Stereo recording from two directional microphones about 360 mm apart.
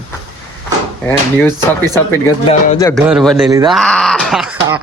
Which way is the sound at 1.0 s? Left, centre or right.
Centre.